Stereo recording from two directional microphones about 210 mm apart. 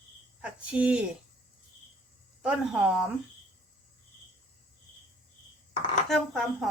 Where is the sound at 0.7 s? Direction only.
5° right (ahead or behind).